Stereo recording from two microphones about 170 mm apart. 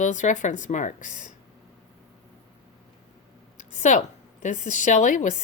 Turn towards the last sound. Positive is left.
turn(degrees=50)  # may be behind; listen again after turning